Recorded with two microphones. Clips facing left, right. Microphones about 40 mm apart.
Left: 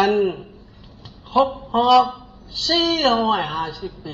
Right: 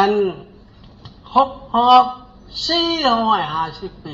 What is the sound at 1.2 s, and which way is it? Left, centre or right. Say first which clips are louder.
Speech: right 2 dB; right.